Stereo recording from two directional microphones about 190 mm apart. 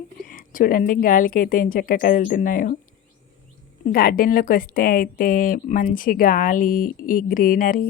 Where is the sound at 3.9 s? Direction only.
50° left (ahead or behind).